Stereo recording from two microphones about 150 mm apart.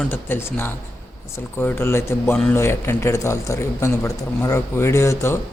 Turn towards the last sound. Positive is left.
turn(degrees=20)  # may be behind; listen again after turning